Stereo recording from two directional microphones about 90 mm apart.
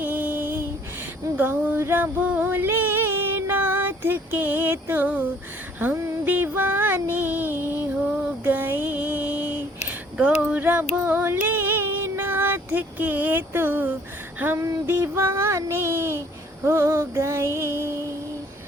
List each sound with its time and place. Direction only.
0.0 s female singing: 20° right (ahead or behind)
1.4 s music: 25° right (ahead or behind)
5.8 s female singing: 20° right (ahead or behind)
14.3 s a sound: 20° right (ahead or behind)
14.6 s child singing: 35° right (ahead or behind)